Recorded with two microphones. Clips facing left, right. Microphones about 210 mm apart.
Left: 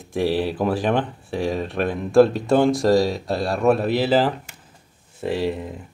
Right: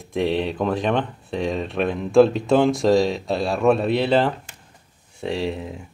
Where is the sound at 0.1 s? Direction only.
5° left (ahead or behind).